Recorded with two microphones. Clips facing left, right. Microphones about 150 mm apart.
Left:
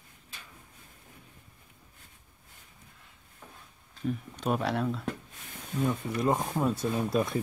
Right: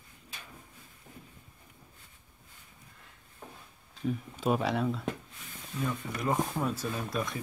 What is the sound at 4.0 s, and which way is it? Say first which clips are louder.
Speech: right 1 dB; centre (ahead or behind).